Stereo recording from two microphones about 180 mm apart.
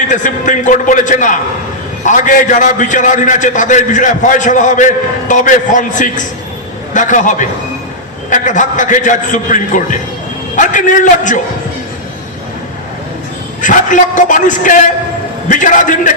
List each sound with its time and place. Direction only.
0.1 s a man's voice: 45° left (ahead or behind)
13.6 s a man's voice: 45° left (ahead or behind)